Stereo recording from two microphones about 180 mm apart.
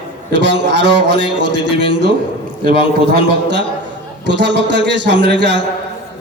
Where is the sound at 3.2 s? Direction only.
75° right (ahead or behind).